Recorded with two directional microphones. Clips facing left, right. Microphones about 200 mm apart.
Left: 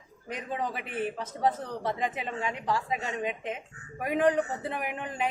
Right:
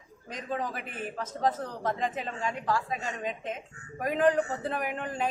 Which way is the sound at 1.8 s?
15° left (ahead or behind).